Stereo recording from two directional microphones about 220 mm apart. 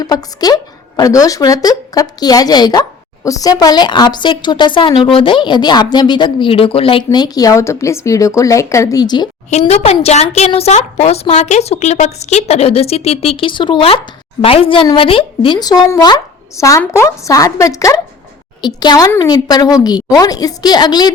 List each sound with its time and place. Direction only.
0.0 s a woman's voice: 15° left (ahead or behind)
9.5 s a woman's voice: 30° left (ahead or behind)